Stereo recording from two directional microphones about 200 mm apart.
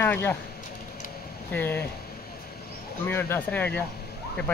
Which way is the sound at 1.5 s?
10° left (ahead or behind).